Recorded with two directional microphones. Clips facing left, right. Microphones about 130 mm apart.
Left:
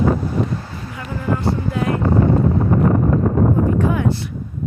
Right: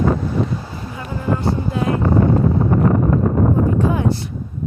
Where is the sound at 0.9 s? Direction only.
25° right (ahead or behind).